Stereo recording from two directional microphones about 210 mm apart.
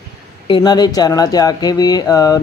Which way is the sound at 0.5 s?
20° left (ahead or behind).